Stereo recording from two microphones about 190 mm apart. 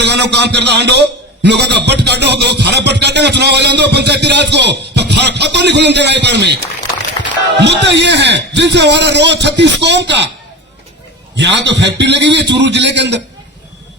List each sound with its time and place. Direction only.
0.0 s a man's voice: 65° right (ahead or behind)
7.6 s a man's voice: 65° right (ahead or behind)
11.3 s a man's voice: 65° right (ahead or behind)